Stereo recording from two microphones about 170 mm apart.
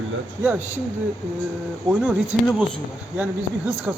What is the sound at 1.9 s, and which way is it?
Speech, 5° right (ahead or behind).